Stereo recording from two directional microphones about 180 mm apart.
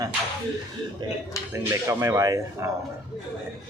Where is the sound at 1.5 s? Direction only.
15° right (ahead or behind).